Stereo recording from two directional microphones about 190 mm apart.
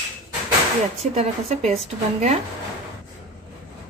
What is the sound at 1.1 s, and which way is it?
Speech, 35° right (ahead or behind).